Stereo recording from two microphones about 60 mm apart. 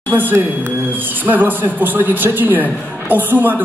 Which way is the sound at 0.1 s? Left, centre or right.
Right.